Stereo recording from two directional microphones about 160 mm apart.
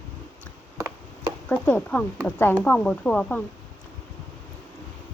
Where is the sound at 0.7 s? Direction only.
20° right (ahead or behind).